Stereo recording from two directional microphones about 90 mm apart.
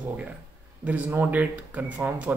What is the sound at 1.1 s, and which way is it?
Speech, 20° right (ahead or behind).